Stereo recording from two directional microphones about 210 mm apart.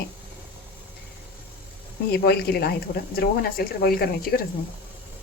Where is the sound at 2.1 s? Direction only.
50° left (ahead or behind).